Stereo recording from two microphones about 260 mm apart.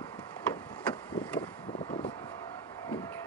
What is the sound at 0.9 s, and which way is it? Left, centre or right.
Vehicle, centre.